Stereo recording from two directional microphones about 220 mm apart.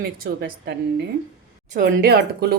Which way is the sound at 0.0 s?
50° right (ahead or behind).